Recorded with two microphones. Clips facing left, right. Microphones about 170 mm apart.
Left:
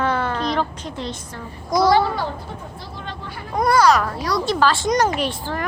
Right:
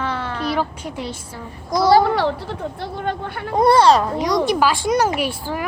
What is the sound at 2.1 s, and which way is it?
Speech, 80° right.